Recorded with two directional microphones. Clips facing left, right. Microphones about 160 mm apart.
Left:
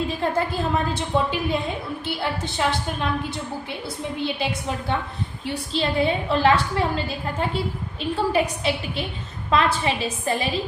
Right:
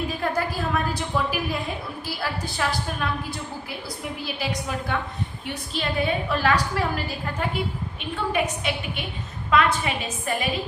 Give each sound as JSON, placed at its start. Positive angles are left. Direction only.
{"t": 0.2, "sound": "a woman's voice", "side_deg": 25}
{"t": 5.7, "sound": "a woman's voice", "side_deg": 25}